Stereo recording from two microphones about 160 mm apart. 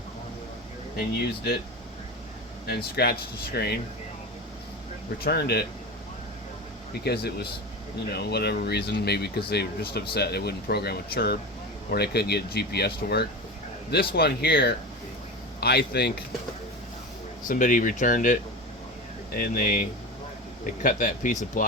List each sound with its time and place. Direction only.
0.9 s speech: 85° left
2.6 s speech: 85° left
5.2 s speech: 90° left
7.0 s speech: 90° left
17.5 s speech: 55° left (ahead or behind)
19.4 s speech: 55° left (ahead or behind)